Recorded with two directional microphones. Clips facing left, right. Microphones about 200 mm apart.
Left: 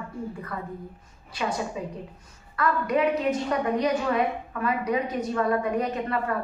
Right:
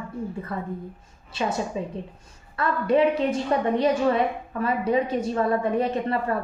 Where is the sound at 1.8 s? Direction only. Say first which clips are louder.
Right 3 dB; 30° right (ahead or behind).